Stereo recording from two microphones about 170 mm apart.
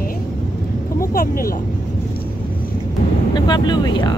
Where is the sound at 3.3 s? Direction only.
25° left (ahead or behind).